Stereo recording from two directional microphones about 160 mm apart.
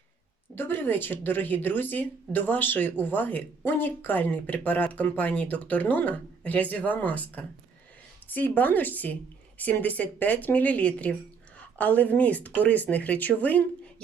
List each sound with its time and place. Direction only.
0.5 s speech: 15° left (ahead or behind)